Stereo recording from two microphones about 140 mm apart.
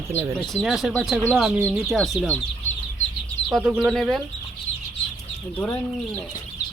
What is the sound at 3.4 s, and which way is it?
Speech, 5° right (ahead or behind).